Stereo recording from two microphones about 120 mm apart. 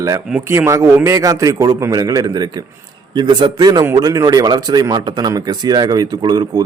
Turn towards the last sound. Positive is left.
turn(degrees=-40)  # may be behind; listen again after turning